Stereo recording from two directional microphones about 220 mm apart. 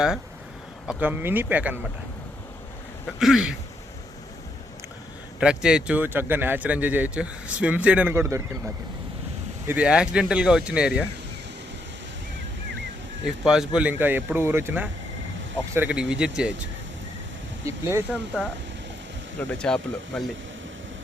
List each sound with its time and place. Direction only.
0.9 s speech: 5° right (ahead or behind)
3.2 s speech: centre (ahead or behind)
5.4 s speech: 5° right (ahead or behind)
13.2 s speech: centre (ahead or behind)
17.7 s speech: 10° right (ahead or behind)
19.4 s speech: 5° left (ahead or behind)